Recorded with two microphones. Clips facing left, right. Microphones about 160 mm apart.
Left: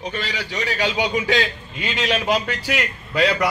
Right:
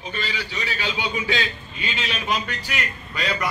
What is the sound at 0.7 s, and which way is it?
A man's voice, 85° left.